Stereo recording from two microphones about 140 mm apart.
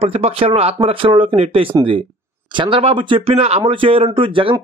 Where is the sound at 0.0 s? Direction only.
45° right (ahead or behind).